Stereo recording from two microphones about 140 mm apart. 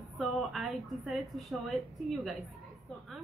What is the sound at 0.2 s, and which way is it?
A woman's voice, centre (ahead or behind).